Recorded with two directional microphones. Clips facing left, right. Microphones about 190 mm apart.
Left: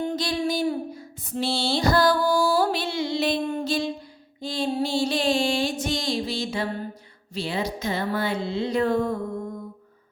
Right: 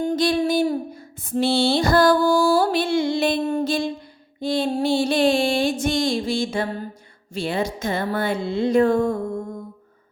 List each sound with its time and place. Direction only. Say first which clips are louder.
0.0 s a sound: right 6 dB; 45° right (ahead or behind)
1.2 s music: right 7 dB; 55° right (ahead or behind)
7.3 s speech: right 4 dB; 50° right (ahead or behind)